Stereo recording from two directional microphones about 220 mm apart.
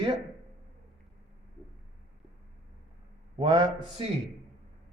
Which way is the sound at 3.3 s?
20° right (ahead or behind).